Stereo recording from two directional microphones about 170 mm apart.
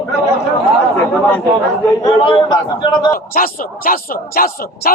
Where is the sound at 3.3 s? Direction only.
55° left (ahead or behind).